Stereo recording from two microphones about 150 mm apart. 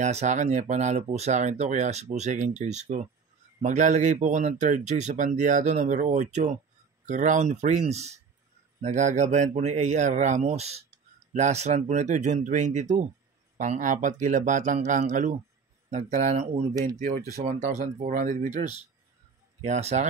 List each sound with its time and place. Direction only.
0.0 s speech: 50° right (ahead or behind)
16.8 s speech: 65° right (ahead or behind)
17.5 s speech: 50° right (ahead or behind)
19.6 s speech: 50° right (ahead or behind)